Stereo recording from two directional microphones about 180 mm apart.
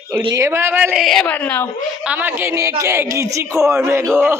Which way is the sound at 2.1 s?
10° right (ahead or behind).